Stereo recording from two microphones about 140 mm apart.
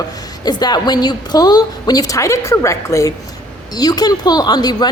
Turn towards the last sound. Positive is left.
turn(degrees=30)  # may be behind; listen again after turning